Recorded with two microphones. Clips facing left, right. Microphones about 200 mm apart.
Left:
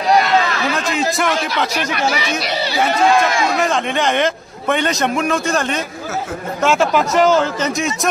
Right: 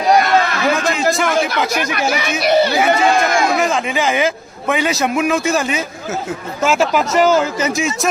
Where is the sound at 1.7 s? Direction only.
50° right (ahead or behind).